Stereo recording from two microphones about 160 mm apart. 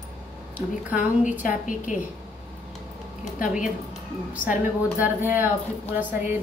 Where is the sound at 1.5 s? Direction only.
50° left (ahead or behind).